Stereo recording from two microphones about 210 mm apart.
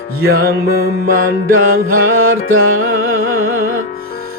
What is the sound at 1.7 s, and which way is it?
Music, 75° right (ahead or behind).